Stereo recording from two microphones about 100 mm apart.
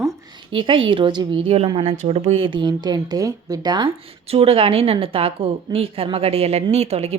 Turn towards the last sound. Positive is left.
turn(degrees=-90)